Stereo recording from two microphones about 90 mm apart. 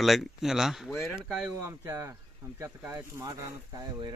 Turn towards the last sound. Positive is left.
turn(degrees=-50)  # may be behind; listen again after turning